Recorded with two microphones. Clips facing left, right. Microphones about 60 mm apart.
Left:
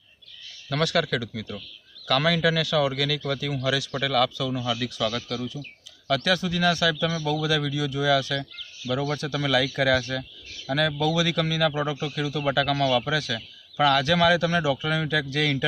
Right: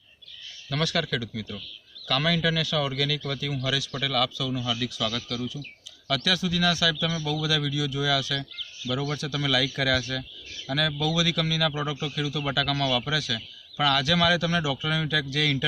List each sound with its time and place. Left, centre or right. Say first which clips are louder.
0.7 s a man's voice: left 3 dB; left